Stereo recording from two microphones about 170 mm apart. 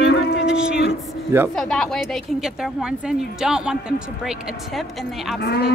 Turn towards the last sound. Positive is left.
turn(degrees=75)  # may be behind; listen again after turning